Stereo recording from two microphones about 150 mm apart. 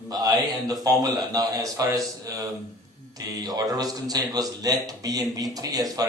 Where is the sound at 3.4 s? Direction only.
25° right (ahead or behind).